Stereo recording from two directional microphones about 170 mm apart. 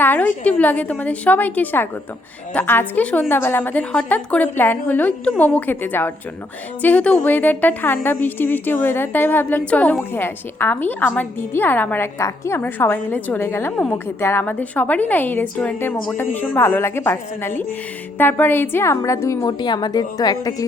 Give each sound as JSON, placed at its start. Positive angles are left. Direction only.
{"t": 0.0, "sound": "a woman's voice", "side_deg": 10}